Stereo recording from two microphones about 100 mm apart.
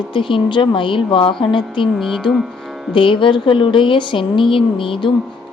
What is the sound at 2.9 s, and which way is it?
Speech, 55° left (ahead or behind).